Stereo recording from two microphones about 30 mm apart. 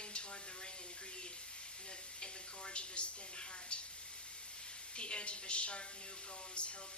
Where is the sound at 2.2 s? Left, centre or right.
Left.